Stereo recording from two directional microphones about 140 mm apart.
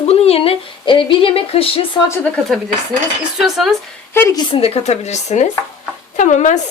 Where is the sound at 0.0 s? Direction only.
45° left (ahead or behind).